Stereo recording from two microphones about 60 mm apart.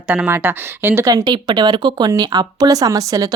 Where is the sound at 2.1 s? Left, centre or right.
Right.